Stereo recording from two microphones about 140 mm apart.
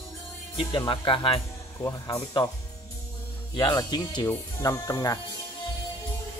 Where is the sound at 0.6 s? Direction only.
40° left (ahead or behind).